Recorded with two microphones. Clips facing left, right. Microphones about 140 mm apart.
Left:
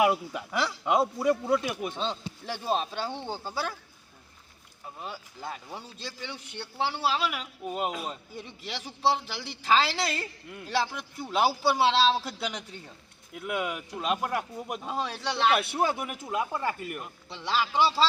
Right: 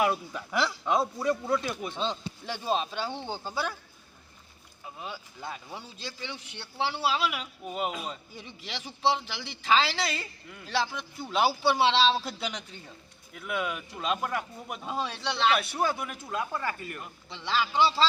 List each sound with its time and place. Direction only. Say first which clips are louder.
0.0 s speech: left 3 dB; 15° left (ahead or behind)
4.9 s speech: even; 5° left (ahead or behind)
13.3 s speech: left 1 dB; 15° left (ahead or behind)
15.7 s speech: left 2 dB; 20° left (ahead or behind)
17.0 s speech: left 2 dB; 5° left (ahead or behind)